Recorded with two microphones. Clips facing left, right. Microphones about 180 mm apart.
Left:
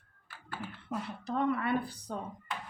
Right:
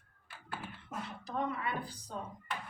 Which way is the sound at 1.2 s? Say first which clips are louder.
Left 6 dB; 65° left (ahead or behind).